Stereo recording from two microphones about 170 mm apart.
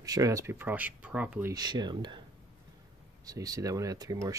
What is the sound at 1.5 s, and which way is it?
Speech, 25° right (ahead or behind).